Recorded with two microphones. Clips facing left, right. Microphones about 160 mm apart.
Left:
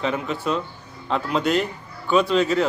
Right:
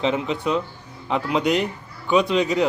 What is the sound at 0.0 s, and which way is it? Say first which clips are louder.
A man's voice: right 2 dB; 20° right (ahead or behind).